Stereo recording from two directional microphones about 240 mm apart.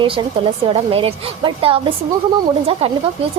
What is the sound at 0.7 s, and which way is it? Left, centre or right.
A woman's voice, right.